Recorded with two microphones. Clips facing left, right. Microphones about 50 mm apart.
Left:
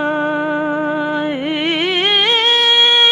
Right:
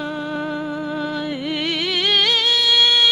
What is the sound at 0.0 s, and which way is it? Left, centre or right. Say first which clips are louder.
Music: left 8 dB; left.